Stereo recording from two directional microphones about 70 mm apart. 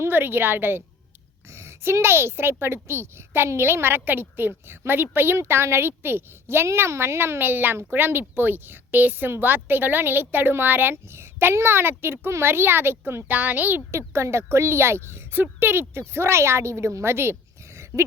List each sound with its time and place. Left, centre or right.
0.0 s speech: right
13.9 s speech: right
17.9 s a sound: left